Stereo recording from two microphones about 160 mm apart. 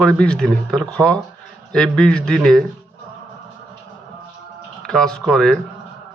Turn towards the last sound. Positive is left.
turn(degrees=5)  # may be behind; listen again after turning